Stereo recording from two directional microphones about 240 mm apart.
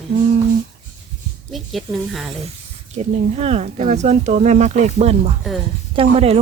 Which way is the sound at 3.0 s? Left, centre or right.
Right.